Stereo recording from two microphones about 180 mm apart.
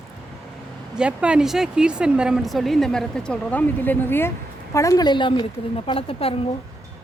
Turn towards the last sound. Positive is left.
turn(degrees=30)  # may be behind; listen again after turning